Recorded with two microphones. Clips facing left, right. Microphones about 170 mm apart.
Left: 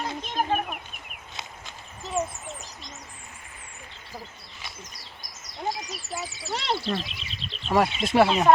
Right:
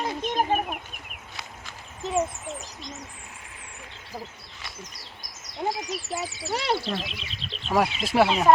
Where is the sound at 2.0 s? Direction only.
20° right (ahead or behind).